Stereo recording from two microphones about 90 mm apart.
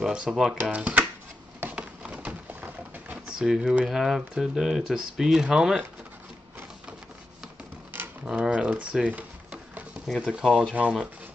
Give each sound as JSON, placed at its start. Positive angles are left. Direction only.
{"t": 0.0, "sound": "speech", "side_deg": -10}
{"t": 1.6, "sound": "a sound", "side_deg": -15}
{"t": 8.3, "sound": "speech", "side_deg": -10}